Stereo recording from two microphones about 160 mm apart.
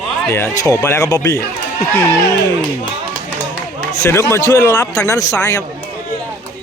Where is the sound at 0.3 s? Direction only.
15° left (ahead or behind).